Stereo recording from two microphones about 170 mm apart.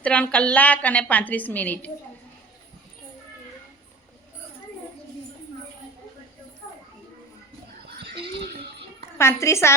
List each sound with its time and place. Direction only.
0.0 s a woman's voice: 5° left (ahead or behind)
9.1 s a woman's voice: 15° left (ahead or behind)